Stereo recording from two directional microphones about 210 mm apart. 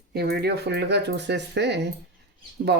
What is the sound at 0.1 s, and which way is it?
Speech, 50° right (ahead or behind).